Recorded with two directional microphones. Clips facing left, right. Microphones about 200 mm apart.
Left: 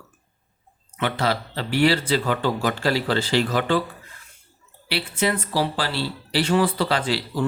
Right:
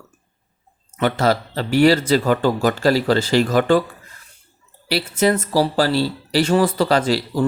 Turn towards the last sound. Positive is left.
turn(degrees=-40)  # may be behind; listen again after turning